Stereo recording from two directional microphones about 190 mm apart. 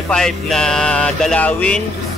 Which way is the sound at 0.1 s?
5° left (ahead or behind).